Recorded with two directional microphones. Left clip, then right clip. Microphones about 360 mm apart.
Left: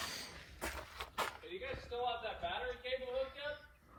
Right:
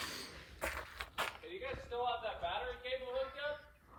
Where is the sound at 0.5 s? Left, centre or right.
Centre.